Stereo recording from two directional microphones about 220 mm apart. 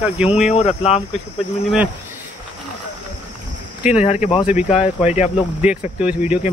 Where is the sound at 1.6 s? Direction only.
5° right (ahead or behind).